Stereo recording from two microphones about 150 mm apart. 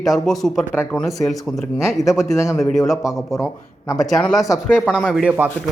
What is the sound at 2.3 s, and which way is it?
Speech, 20° left (ahead or behind).